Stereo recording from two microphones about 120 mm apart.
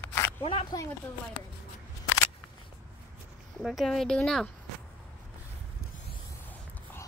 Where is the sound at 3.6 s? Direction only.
Centre (ahead or behind).